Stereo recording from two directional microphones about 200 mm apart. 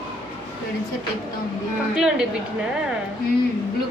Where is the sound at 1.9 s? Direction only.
5° right (ahead or behind).